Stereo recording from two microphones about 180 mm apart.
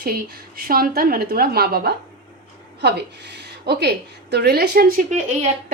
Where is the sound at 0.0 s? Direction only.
55° right (ahead or behind).